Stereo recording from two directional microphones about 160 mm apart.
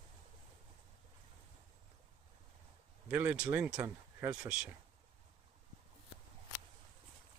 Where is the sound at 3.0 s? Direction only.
10° right (ahead or behind).